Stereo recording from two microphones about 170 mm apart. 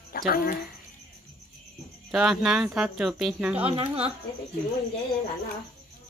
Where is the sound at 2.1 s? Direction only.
5° right (ahead or behind).